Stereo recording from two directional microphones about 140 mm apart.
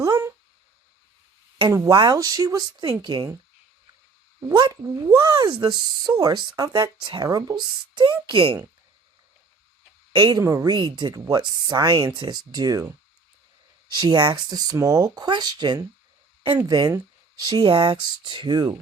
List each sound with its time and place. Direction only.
0.0 s a sound: 20° right (ahead or behind)
1.7 s speech: 20° right (ahead or behind)
4.4 s speech: 30° right (ahead or behind)
10.2 s speech: 30° right (ahead or behind)
14.1 s speech: 35° right (ahead or behind)